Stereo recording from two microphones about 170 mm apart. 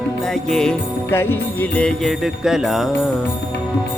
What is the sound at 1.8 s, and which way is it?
Jingle bell, centre (ahead or behind).